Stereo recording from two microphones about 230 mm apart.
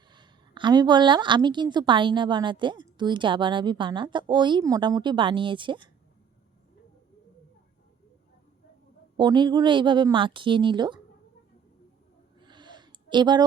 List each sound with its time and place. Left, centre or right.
0.1 s a woman's voice: centre
9.1 s a woman's voice: centre
12.4 s a sound: centre